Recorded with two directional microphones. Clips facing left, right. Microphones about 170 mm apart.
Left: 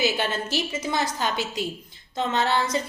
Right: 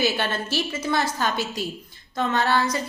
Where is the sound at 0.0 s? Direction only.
20° left (ahead or behind).